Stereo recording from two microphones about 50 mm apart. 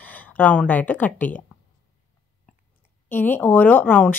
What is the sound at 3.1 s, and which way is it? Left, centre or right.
Speech, left.